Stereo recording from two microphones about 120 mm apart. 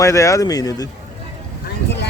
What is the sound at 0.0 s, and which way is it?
Speech, 25° left (ahead or behind).